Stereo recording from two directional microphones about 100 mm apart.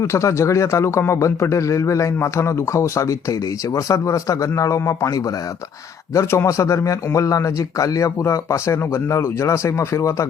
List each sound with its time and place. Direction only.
0.0 s a man's voice: 30° left (ahead or behind)